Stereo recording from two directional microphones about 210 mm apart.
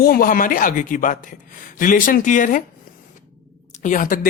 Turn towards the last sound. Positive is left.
turn(degrees=40)  # may be behind; listen again after turning